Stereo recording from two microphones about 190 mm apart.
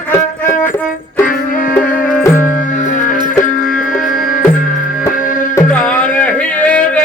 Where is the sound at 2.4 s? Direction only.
45° left (ahead or behind).